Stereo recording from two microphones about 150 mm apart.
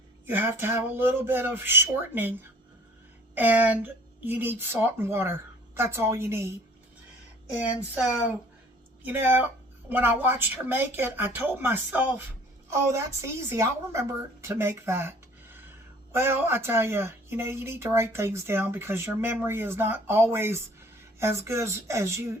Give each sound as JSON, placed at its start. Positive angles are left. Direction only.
{"t": 0.3, "sound": "speech", "side_deg": -15}
{"t": 9.0, "sound": "speech", "side_deg": -15}
{"t": 14.4, "sound": "a sound", "side_deg": -15}
{"t": 16.1, "sound": "speech", "side_deg": -15}